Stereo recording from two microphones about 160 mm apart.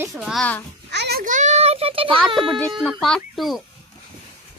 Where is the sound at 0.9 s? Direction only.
85° right.